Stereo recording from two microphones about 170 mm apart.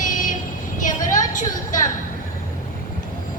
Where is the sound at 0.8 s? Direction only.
50° left (ahead or behind).